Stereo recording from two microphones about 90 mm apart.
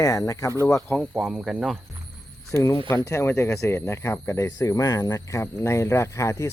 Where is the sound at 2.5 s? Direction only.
30° left (ahead or behind).